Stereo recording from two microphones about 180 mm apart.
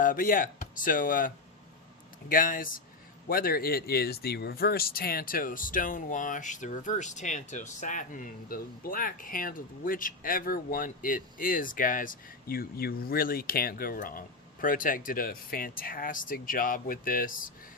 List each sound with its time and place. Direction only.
0.0 s speech: 50° left (ahead or behind)
2.3 s speech: 50° left (ahead or behind)